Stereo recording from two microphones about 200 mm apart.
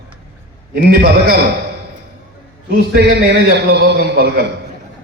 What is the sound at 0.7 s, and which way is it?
Speech, 50° right (ahead or behind).